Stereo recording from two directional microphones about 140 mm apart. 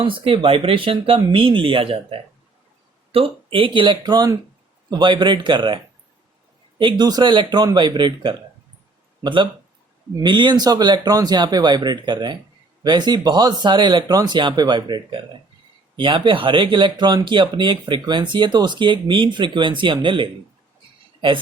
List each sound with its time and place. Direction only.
0.0 s speech: 40° right (ahead or behind)